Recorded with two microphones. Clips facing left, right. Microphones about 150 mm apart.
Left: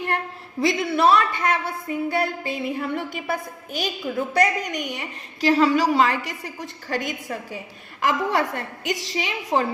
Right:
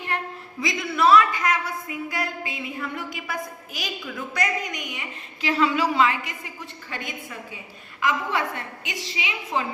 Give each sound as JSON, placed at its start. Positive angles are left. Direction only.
{"t": 0.9, "sound": "a woman's voice", "side_deg": 30}
{"t": 8.0, "sound": "a woman's voice", "side_deg": 40}